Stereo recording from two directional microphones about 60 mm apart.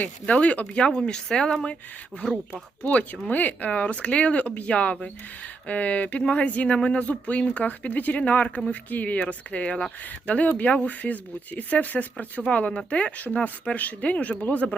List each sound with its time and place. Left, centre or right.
0.0 s speech: left
2.8 s speech: left